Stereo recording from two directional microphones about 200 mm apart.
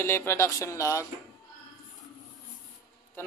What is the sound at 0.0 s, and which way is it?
A man's voice, 10° left (ahead or behind).